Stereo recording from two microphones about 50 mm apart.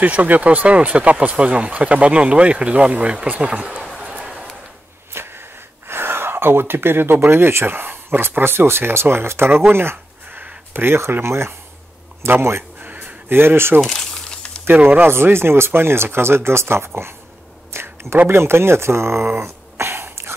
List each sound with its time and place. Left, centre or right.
0.0 s speech: right
5.1 s a sound: right
5.9 s gasp: right
7.2 s speech: right
13.7 s a sound: centre
14.8 s speech: right
15.0 s speech: right
17.6 s a sound: right
18.3 s speech: right